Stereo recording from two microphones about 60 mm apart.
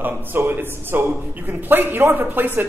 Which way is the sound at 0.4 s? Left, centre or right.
Right.